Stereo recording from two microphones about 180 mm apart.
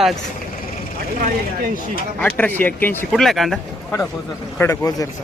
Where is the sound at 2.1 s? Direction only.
10° left (ahead or behind).